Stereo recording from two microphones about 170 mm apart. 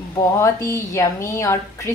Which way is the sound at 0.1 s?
15° left (ahead or behind).